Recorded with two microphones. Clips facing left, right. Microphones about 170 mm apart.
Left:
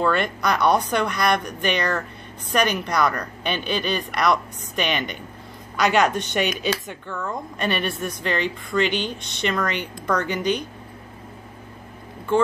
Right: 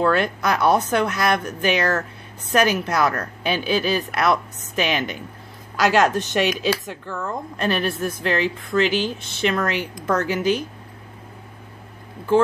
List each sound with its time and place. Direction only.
0.0 s speech: centre (ahead or behind)